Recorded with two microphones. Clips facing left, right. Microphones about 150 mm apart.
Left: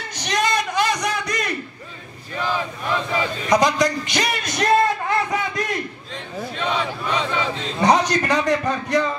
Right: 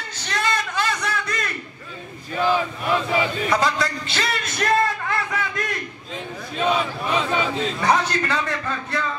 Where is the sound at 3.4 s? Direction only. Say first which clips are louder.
Left 4 dB; 15° left (ahead or behind).